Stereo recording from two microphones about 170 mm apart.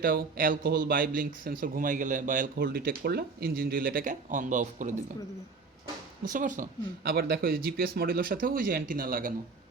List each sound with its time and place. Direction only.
0.0 s speech: 60° right (ahead or behind)
6.2 s speech: 50° right (ahead or behind)